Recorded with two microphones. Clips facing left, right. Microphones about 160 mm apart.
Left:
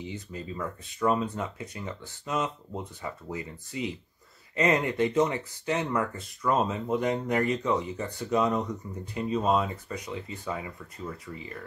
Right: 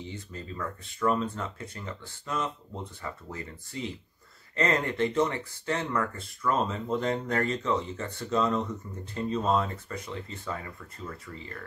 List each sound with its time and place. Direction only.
0.0 s speech: 15° left (ahead or behind)